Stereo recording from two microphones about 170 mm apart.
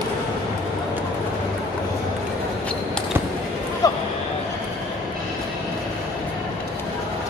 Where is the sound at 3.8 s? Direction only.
20° left (ahead or behind).